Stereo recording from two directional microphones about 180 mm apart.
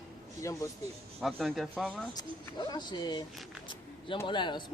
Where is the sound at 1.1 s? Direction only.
10° right (ahead or behind).